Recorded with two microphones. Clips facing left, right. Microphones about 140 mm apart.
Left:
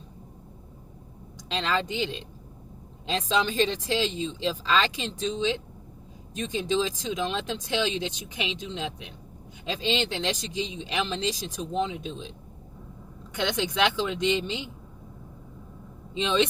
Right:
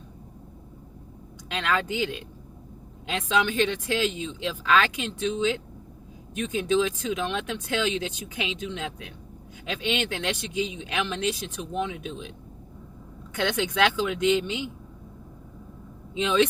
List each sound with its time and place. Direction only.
1.5 s speech: 25° left (ahead or behind)
13.4 s speech: 20° left (ahead or behind)
16.1 s speech: 25° left (ahead or behind)